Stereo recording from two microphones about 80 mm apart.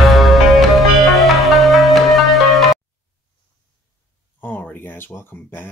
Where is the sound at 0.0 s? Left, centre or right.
Centre.